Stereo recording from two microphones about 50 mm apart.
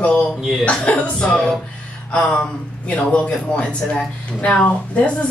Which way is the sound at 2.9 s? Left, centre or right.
Left.